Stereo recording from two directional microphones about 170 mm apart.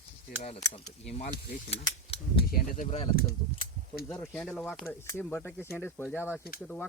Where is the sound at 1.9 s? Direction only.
30° left (ahead or behind).